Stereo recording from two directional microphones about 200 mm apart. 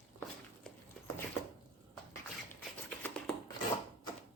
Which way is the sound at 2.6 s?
5° left (ahead or behind).